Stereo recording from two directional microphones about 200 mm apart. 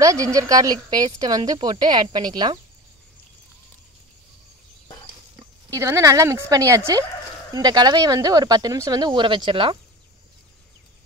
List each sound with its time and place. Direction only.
0.0 s a woman's voice: 15° right (ahead or behind)
5.7 s a woman's voice: 15° right (ahead or behind)